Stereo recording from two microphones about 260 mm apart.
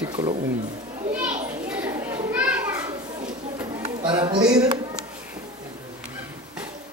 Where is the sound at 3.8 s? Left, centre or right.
Centre.